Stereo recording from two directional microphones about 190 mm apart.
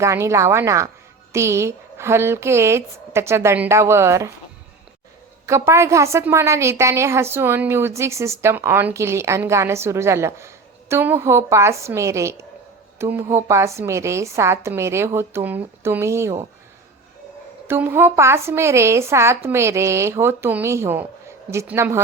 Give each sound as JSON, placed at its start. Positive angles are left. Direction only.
{"t": 0.0, "sound": "a woman's voice", "side_deg": -15}
{"t": 5.5, "sound": "a woman's voice", "side_deg": -15}
{"t": 17.7, "sound": "a woman's voice", "side_deg": -10}